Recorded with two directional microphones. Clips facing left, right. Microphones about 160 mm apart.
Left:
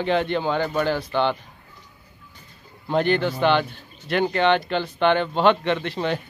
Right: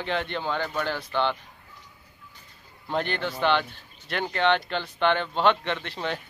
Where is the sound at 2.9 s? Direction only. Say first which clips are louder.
Left 7 dB; 5° left (ahead or behind).